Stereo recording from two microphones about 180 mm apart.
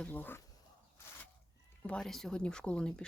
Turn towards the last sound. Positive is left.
turn(degrees=5)  # may be behind; listen again after turning